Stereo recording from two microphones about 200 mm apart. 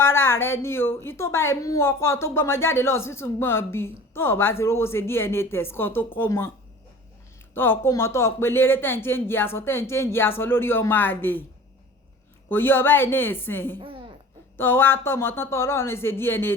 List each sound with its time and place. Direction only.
0.0 s a woman's voice: 10° left (ahead or behind)
7.5 s a woman's voice: 10° left (ahead or behind)
12.5 s a woman's voice: 10° left (ahead or behind)
13.7 s speech: 25° right (ahead or behind)
14.5 s a woman's voice: 10° left (ahead or behind)